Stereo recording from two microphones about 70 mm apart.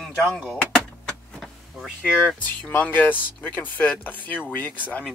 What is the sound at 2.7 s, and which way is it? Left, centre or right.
Speech, left.